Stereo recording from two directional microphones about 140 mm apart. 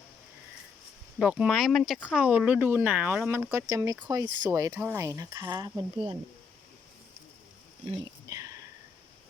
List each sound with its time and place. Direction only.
1.2 s speech: 10° right (ahead or behind); by 6.1 s 25° right (ahead or behind)
8.3 s whispering: 25° right (ahead or behind)